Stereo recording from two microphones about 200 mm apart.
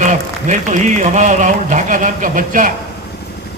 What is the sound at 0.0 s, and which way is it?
Speech, 40° right (ahead or behind).